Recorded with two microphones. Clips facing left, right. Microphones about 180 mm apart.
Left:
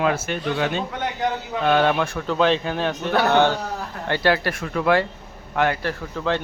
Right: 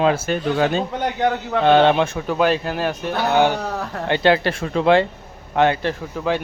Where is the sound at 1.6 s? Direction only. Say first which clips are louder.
Right 5 dB; 30° right (ahead or behind).